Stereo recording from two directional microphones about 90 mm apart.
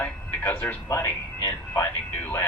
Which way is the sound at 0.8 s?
30° left (ahead or behind).